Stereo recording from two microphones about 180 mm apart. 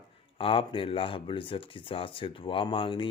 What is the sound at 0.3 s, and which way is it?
Speech, 30° left (ahead or behind).